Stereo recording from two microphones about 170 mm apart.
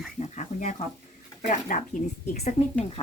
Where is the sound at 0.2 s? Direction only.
45° left (ahead or behind).